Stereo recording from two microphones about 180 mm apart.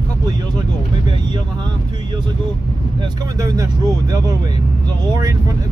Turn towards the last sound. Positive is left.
turn(degrees=-20)  # may be behind; listen again after turning